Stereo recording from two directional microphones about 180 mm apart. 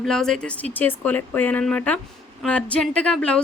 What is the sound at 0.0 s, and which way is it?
Speech, centre (ahead or behind).